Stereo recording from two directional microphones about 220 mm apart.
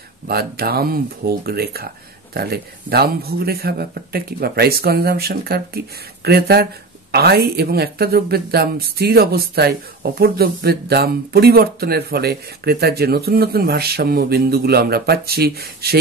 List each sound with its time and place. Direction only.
0.3 s speech: 45° right (ahead or behind)